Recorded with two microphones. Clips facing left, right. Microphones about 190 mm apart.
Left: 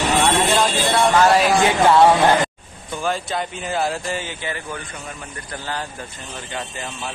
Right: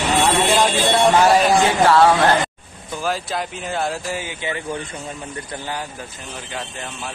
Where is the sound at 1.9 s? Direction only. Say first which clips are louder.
Left 2 dB; 15° left (ahead or behind).